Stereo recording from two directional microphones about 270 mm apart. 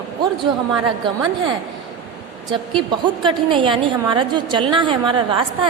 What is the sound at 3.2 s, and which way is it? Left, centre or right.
A woman's voice, centre.